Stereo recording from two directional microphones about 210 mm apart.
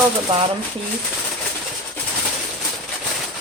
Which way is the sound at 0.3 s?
30° right (ahead or behind).